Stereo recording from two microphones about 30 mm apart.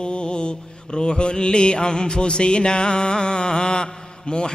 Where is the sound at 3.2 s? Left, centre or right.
Left.